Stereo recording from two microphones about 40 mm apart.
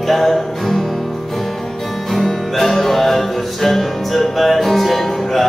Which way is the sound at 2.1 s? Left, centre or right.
Centre.